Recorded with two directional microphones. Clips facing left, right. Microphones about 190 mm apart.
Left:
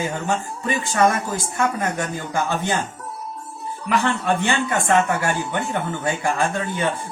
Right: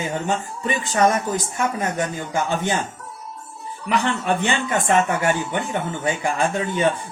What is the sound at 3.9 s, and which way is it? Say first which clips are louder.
Speech: left 1 dB; 15° right (ahead or behind).